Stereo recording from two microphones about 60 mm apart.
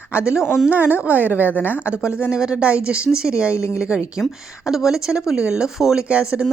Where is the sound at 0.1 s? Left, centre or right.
Centre.